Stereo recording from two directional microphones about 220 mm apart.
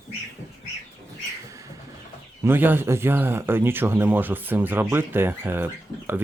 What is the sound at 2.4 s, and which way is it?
Speech, 10° right (ahead or behind).